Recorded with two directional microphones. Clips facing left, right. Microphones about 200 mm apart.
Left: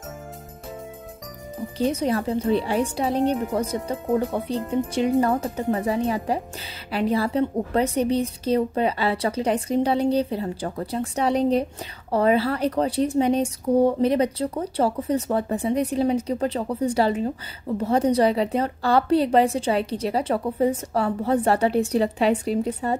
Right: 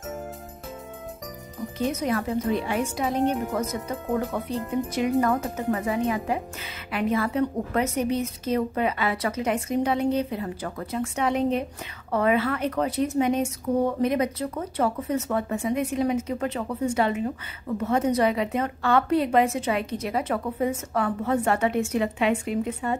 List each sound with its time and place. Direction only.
1.8 s speech: 30° left (ahead or behind)